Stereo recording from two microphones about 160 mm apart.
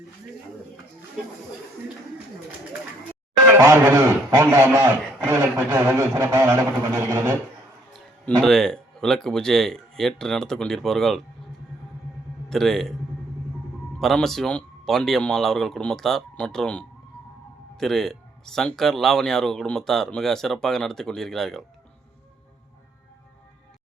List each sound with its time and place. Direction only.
3.6 s a man's voice: 15° right (ahead or behind)
6.1 s music: 20° right (ahead or behind)
6.9 s a man's voice: 20° right (ahead or behind)
7.9 s speech: centre (ahead or behind)
12.5 s speech: centre (ahead or behind)
14.0 s speech: 5° left (ahead or behind)